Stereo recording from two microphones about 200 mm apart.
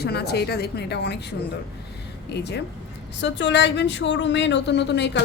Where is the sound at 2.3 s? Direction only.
60° left (ahead or behind).